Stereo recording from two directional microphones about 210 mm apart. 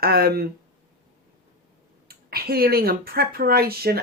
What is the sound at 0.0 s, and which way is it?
Speech, 45° right (ahead or behind).